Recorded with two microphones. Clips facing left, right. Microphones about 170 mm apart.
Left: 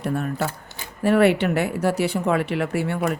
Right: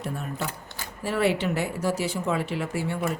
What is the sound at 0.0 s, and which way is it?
Speech, 65° left (ahead or behind).